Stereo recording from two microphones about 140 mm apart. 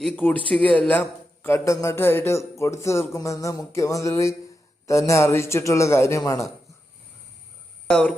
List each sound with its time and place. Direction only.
0.2 s a man's voice: 10° left (ahead or behind)
2.6 s a sound: 20° left (ahead or behind)
7.9 s speech: 5° left (ahead or behind)